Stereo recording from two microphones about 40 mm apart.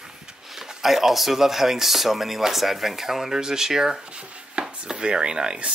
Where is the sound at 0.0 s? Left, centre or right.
Centre.